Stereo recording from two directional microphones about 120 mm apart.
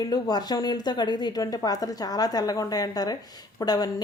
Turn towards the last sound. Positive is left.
turn(degrees=35)  # may be behind; listen again after turning